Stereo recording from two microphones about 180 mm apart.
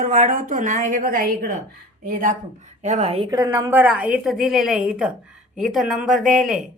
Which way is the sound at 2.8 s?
35° right (ahead or behind).